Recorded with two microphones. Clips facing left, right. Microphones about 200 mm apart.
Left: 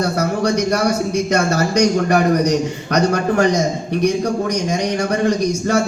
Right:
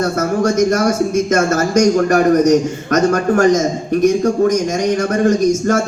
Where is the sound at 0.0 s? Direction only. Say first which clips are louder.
Right 2 dB; 45° right (ahead or behind).